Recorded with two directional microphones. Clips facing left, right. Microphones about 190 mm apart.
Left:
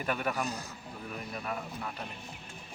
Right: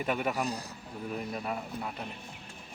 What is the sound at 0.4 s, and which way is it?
A man's voice, 35° right (ahead or behind).